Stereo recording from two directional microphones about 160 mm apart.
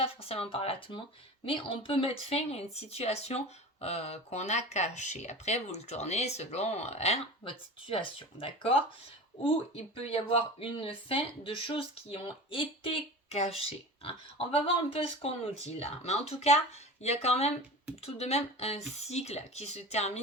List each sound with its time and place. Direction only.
0.0 s speech: 40° left (ahead or behind)